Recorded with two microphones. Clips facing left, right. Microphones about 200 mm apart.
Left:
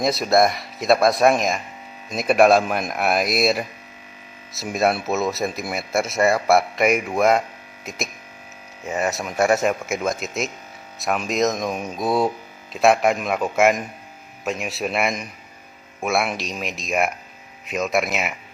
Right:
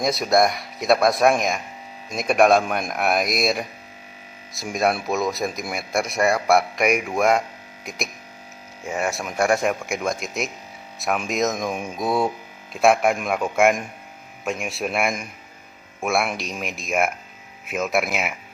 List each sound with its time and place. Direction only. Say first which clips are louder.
0.0 s speech: left 1 dB; centre (ahead or behind)
4.7 s speech: left 1 dB; 5° left (ahead or behind)